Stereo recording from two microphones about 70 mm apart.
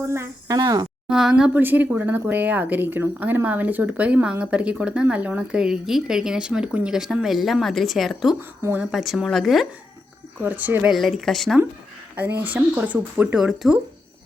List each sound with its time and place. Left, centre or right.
0.4 s speech: right
1.0 s a woman's voice: centre
1.5 s a woman's voice: right; by 8.4 s centre
8.4 s speech: right
8.9 s a woman's voice: centre
10.4 s a woman's voice: right
10.9 s a woman's voice: centre
12.1 s a woman's voice: right
13.3 s a woman's voice: centre